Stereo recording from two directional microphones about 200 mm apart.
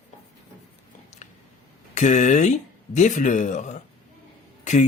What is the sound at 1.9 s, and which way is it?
Speech, 40° left (ahead or behind).